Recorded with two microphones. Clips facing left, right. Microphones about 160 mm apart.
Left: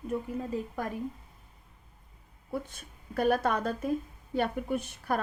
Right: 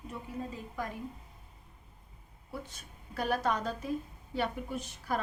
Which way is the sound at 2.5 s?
50° left (ahead or behind).